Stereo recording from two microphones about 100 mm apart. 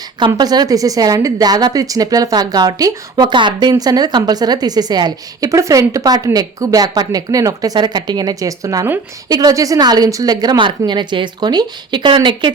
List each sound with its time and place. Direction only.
0.3 s a woman's voice: 40° right (ahead or behind)
10.6 s speech: 50° right (ahead or behind)